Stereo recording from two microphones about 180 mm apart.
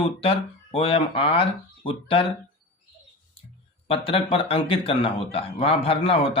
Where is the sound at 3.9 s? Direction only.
30° left (ahead or behind).